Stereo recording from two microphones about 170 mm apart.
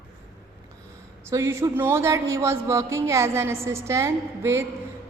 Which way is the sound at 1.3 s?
15° right (ahead or behind).